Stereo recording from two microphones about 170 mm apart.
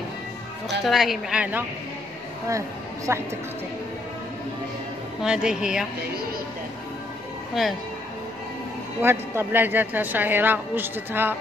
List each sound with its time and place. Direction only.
0.7 s a woman's voice: centre (ahead or behind)
3.1 s a woman's voice: 15° right (ahead or behind)
5.2 s a woman's voice: 5° right (ahead or behind)
7.6 s a woman's voice: centre (ahead or behind)
9.0 s a woman's voice: 15° right (ahead or behind)